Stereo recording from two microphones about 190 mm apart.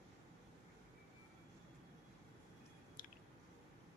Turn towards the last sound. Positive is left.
turn(degrees=45)  # may be behind; listen again after turning